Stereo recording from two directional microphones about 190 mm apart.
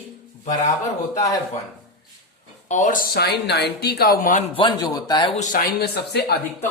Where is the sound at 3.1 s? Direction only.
60° left (ahead or behind).